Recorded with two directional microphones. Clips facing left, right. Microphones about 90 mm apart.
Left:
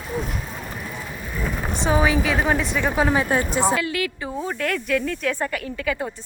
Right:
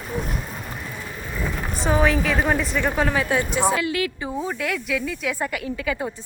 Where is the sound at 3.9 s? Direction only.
30° right (ahead or behind).